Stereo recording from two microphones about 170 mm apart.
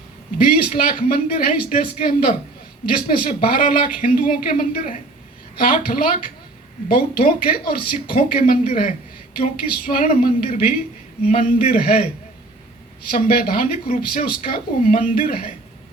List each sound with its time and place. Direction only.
0.4 s speech: 55° left (ahead or behind)
13.1 s speech: 55° left (ahead or behind)